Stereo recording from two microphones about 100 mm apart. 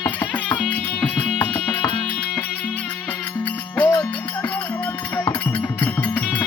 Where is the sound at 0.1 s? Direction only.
15° left (ahead or behind).